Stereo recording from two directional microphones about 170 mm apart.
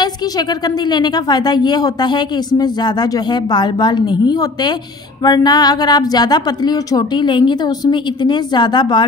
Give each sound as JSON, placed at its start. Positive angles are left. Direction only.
{"t": 0.0, "sound": "a woman's voice", "side_deg": 25}